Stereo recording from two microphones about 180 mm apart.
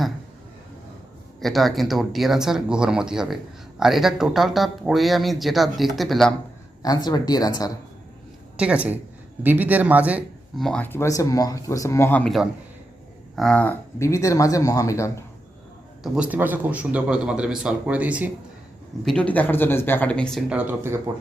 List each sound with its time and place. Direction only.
1.4 s speech: centre (ahead or behind)
6.8 s speech: 20° left (ahead or behind)
8.5 s a woman's voice: 5° right (ahead or behind)
10.7 s speech: 10° left (ahead or behind)
16.0 s a man's voice: 5° right (ahead or behind)
19.0 s speech: 5° left (ahead or behind)
20.5 s a man's voice: 10° right (ahead or behind)